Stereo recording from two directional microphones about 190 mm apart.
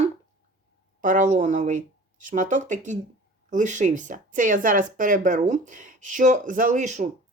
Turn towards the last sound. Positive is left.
turn(degrees=-40)  # may be behind; listen again after turning